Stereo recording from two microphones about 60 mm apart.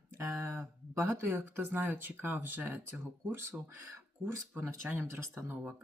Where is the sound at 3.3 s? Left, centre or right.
Right.